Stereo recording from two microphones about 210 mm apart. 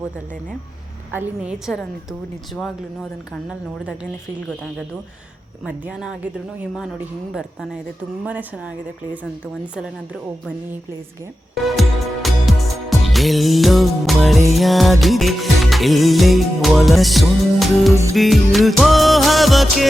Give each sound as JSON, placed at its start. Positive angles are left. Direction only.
{"t": 1.1, "sound": "music of bollywood", "side_deg": -5}
{"t": 5.6, "sound": "music of bollywood", "side_deg": -5}
{"t": 8.2, "sound": "music of bollywood", "side_deg": -5}
{"t": 11.6, "sound": "music", "side_deg": 0}
{"t": 18.1, "sound": "music of bollywood", "side_deg": 0}